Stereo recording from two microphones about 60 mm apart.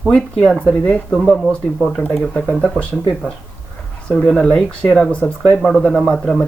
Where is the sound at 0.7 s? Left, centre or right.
Left.